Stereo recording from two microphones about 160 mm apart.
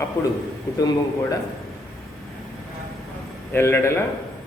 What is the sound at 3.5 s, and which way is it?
Speech, 15° left (ahead or behind).